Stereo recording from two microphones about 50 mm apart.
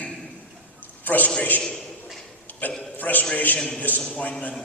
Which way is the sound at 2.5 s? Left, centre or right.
Left.